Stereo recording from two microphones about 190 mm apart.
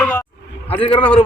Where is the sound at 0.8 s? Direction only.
30° left (ahead or behind).